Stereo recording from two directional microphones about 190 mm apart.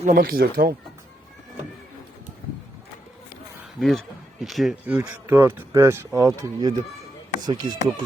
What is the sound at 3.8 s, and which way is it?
Speech, centre (ahead or behind).